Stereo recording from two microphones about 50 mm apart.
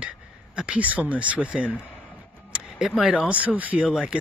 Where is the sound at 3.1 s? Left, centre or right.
Right.